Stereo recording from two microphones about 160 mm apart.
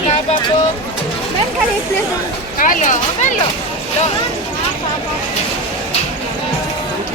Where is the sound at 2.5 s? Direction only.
55° left (ahead or behind).